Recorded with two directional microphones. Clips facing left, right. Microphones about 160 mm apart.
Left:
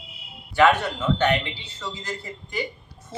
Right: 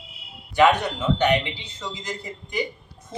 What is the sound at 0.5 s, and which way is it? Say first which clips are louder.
Speech: right 1 dB; 15° right (ahead or behind).